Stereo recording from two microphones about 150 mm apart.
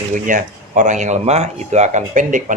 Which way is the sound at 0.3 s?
60° right (ahead or behind).